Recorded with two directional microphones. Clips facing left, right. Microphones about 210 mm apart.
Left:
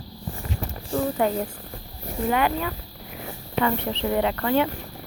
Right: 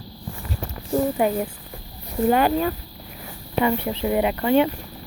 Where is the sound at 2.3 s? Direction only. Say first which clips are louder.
Right 4 dB; 35° right (ahead or behind).